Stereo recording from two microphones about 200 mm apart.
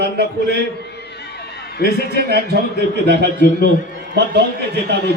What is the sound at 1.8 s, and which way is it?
A man's voice, 55° right (ahead or behind).